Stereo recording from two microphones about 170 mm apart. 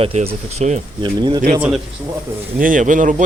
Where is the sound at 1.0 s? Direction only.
25° right (ahead or behind).